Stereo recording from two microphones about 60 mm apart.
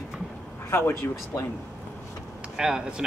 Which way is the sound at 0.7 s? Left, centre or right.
Left.